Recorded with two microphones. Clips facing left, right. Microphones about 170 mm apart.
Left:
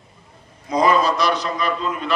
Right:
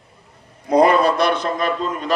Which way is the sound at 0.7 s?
60° right (ahead or behind).